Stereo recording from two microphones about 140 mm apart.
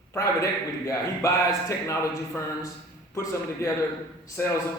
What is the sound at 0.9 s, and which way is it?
A man's voice, 25° left (ahead or behind).